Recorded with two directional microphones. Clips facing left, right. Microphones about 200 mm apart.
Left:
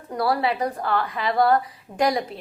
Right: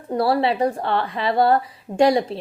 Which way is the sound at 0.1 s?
30° right (ahead or behind).